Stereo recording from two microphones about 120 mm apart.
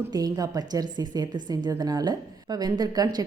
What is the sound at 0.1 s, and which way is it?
A woman's voice, 30° right (ahead or behind).